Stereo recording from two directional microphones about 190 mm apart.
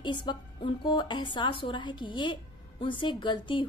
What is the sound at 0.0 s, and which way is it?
A woman's voice, 25° left (ahead or behind).